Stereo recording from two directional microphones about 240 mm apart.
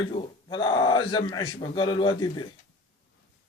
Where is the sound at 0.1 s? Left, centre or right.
Centre.